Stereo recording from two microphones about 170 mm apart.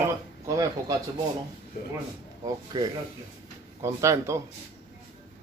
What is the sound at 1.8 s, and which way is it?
Speech, 60° left (ahead or behind).